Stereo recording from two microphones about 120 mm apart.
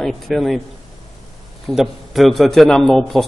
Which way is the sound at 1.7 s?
Centre (ahead or behind).